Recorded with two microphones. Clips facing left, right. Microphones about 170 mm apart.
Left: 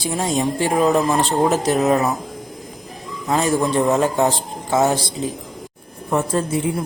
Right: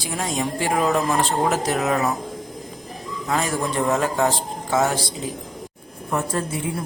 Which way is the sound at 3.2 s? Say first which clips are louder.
Left 5 dB; 25° left (ahead or behind).